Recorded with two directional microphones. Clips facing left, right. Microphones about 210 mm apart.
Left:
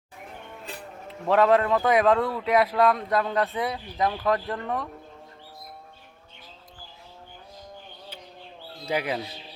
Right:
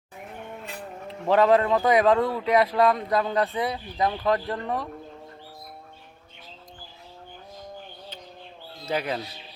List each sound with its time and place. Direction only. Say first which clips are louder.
1.3 s speech: right 1 dB; centre (ahead or behind)
8.9 s speech: even; 10° left (ahead or behind)